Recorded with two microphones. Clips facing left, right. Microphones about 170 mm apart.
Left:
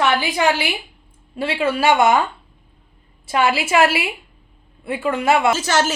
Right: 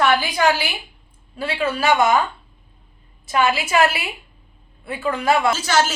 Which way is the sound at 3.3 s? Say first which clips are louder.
Left 1 dB; 30° left (ahead or behind).